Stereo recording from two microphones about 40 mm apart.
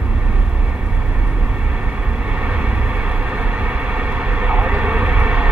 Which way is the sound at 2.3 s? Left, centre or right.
Right.